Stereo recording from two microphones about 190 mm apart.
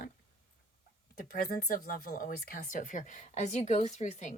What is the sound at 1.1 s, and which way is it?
Speech, 50° left (ahead or behind).